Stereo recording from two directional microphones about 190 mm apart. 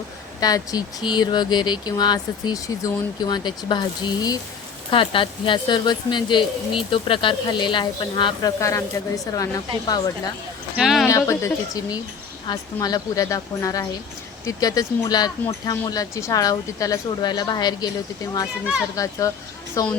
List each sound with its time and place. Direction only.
0.3 s speech: 20° left (ahead or behind)
10.8 s speech: centre (ahead or behind)
11.1 s speech: 15° left (ahead or behind)
18.9 s speech: 15° left (ahead or behind)